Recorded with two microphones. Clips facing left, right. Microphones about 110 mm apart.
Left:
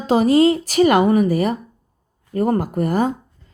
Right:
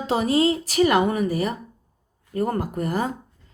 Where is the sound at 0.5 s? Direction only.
50° left (ahead or behind).